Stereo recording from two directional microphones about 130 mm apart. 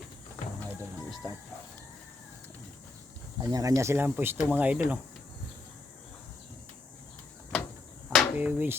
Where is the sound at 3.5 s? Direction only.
25° right (ahead or behind).